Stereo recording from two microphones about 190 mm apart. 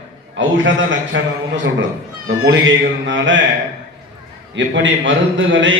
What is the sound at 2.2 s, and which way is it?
A man's voice, 85° right.